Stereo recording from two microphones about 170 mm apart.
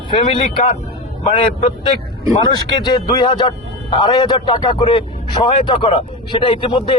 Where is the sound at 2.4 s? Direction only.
25° left (ahead or behind).